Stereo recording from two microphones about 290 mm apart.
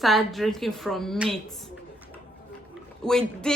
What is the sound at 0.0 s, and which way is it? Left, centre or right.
Speech, centre.